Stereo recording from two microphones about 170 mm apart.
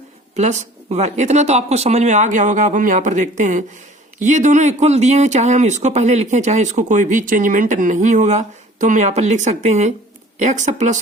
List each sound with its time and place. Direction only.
0.3 s speech: 45° right (ahead or behind)